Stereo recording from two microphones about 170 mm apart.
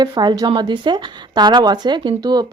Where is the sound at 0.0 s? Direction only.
25° right (ahead or behind).